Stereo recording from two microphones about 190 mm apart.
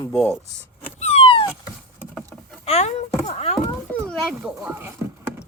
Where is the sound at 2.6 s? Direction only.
35° left (ahead or behind).